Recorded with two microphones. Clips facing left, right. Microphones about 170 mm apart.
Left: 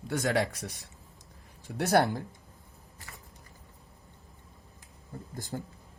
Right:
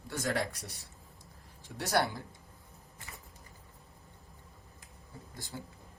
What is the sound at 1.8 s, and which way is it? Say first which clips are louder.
Speech: left 6 dB; 60° left (ahead or behind).